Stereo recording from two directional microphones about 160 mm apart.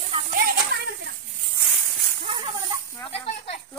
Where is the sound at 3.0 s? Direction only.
35° left (ahead or behind).